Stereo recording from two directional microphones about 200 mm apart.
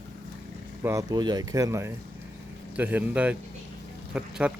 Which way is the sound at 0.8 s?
15° right (ahead or behind).